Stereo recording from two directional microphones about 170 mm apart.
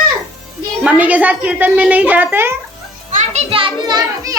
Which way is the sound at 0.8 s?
10° right (ahead or behind).